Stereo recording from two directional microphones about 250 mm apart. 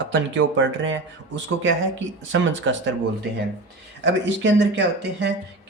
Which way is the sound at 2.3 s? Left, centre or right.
Right.